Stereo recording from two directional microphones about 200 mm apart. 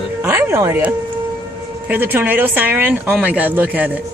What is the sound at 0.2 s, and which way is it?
Speech, 10° right (ahead or behind).